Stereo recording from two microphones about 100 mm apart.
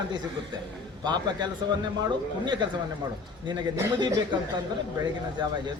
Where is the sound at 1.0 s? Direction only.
45° right (ahead or behind).